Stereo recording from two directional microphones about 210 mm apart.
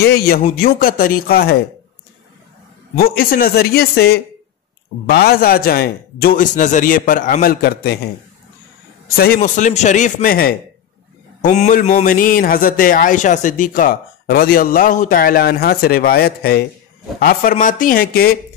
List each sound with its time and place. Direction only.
0.0 s a man's voice: 50° left (ahead or behind)
3.0 s a man's voice: 45° left (ahead or behind)
9.1 s a man's voice: 45° left (ahead or behind)